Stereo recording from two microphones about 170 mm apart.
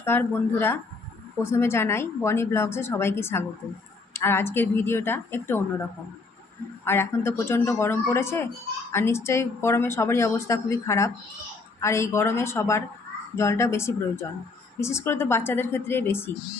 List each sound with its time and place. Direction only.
0.0 s a woman's voice: 15° left (ahead or behind)
6.8 s a woman's voice: 15° left (ahead or behind)